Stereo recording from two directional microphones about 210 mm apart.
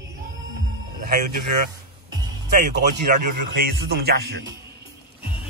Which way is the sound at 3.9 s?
50° right (ahead or behind).